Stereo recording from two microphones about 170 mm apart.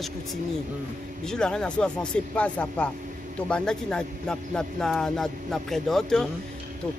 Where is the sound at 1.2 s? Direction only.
5° left (ahead or behind).